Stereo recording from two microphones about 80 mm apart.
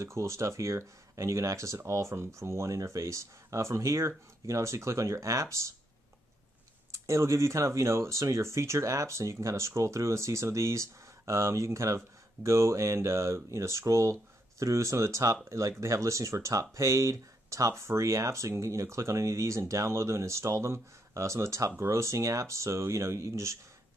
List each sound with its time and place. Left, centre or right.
0.0 s speech: right
7.1 s speech: right